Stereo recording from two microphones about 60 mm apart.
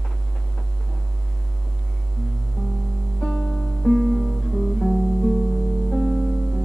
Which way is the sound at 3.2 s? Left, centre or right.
Centre.